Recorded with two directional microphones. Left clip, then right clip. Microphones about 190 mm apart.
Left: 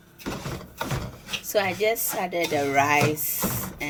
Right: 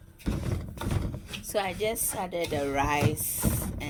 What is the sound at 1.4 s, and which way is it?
Speech, 45° right (ahead or behind).